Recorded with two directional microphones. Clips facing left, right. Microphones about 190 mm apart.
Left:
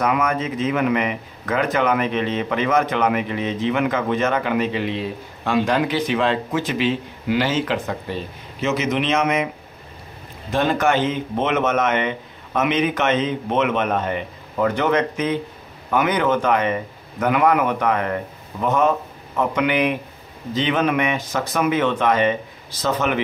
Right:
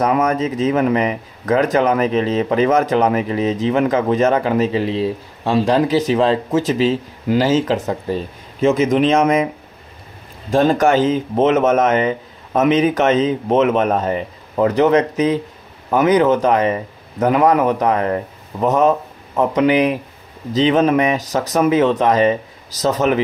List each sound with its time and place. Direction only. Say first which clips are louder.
0.0 s a man's voice: right 4 dB; 40° right (ahead or behind)
10.5 s a man's voice: right 5 dB; 40° right (ahead or behind)